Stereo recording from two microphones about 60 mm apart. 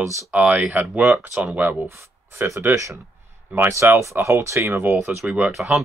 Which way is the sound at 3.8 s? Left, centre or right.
Right.